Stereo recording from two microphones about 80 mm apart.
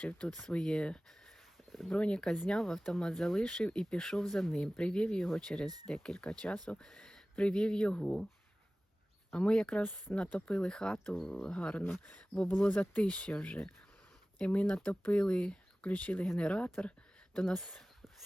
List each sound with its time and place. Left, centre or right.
0.0 s speech: centre
9.3 s speech: centre
12.5 s speech: left